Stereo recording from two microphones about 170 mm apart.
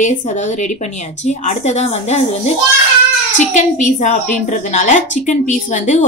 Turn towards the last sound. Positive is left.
turn(degrees=45)  # may be behind; listen again after turning